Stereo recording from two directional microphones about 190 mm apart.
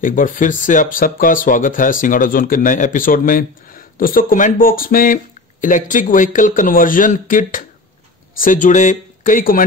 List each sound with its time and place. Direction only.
0.0 s speech: 45° left (ahead or behind)